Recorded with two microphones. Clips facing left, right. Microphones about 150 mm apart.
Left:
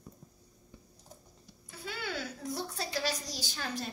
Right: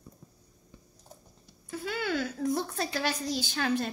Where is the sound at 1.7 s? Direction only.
55° right (ahead or behind).